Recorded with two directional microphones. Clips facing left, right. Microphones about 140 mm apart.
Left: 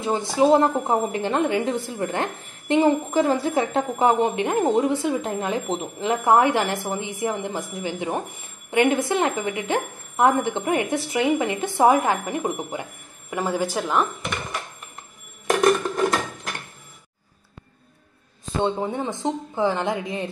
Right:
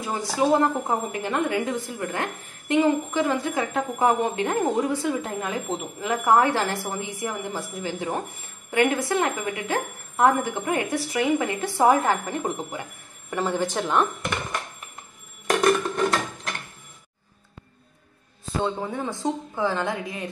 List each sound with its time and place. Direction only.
0.0 s a woman's voice: 25° left (ahead or behind); by 14.0 s centre (ahead or behind)
18.6 s a woman's voice: 25° left (ahead or behind)